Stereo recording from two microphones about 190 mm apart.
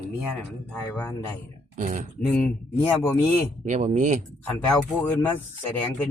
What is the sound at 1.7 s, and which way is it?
Speech, 45° right (ahead or behind).